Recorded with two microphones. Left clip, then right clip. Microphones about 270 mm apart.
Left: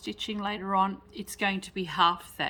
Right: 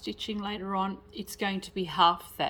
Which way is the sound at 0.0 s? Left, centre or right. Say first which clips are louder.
Left 2 dB; centre.